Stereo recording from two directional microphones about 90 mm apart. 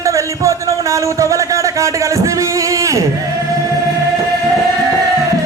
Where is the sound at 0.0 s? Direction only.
35° right (ahead or behind).